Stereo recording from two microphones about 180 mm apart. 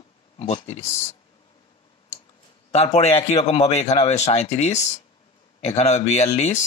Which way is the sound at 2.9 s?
35° left (ahead or behind).